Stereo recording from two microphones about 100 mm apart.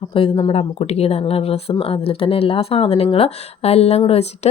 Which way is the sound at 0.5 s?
90° left.